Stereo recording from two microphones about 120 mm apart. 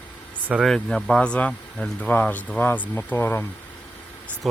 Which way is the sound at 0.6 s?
Centre (ahead or behind).